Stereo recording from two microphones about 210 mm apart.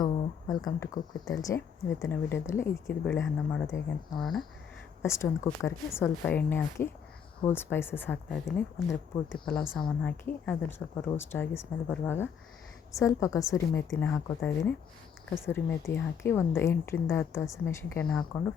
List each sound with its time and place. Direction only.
0.0 s speech: 20° left (ahead or behind); by 4.4 s centre (ahead or behind)
5.0 s speech: 15° left (ahead or behind)